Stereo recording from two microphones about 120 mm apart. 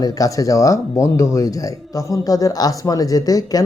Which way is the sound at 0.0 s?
30° left (ahead or behind).